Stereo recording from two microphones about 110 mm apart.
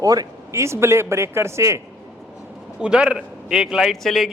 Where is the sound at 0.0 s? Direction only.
35° right (ahead or behind).